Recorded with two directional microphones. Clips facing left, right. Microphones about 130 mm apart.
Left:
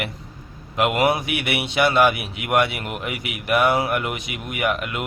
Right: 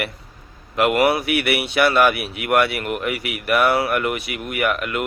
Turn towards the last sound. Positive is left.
turn(degrees=20)  # may be behind; listen again after turning